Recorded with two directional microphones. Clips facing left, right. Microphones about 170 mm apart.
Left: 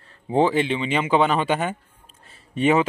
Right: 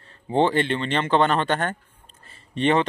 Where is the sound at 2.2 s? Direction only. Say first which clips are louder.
Left 2 dB; 5° left (ahead or behind).